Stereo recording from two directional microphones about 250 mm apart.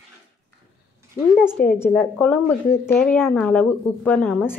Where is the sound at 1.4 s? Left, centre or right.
Centre.